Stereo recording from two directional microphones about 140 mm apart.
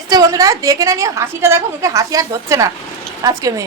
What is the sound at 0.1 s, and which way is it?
A woman's voice, 25° right (ahead or behind).